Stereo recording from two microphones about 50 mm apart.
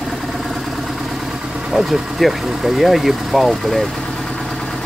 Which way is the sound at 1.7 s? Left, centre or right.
Centre.